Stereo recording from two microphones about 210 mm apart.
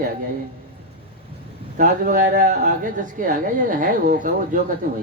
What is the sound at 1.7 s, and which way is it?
A woman's voice, 40° right (ahead or behind).